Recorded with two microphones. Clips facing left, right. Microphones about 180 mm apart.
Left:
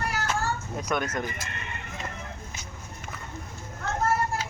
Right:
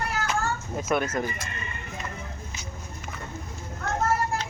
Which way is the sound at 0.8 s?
Centre (ahead or behind).